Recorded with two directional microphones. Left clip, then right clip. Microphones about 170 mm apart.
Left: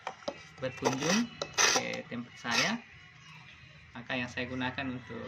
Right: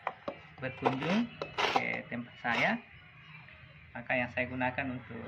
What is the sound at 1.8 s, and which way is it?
Speech, 15° right (ahead or behind).